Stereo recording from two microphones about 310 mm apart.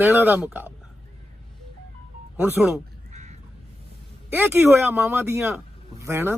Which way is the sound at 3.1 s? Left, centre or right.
Right.